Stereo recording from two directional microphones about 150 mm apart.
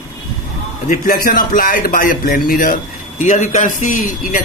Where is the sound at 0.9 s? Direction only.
70° left (ahead or behind).